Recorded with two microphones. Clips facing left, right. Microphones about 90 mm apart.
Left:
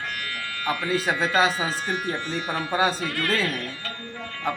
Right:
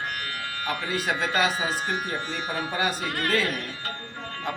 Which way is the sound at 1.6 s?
25° right (ahead or behind).